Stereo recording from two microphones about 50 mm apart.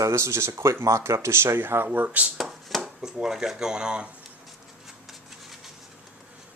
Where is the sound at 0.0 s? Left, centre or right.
Right.